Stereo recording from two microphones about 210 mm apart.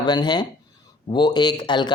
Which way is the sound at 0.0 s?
20° left (ahead or behind).